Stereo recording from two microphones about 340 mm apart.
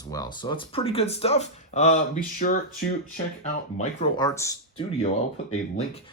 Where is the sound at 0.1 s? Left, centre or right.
Centre.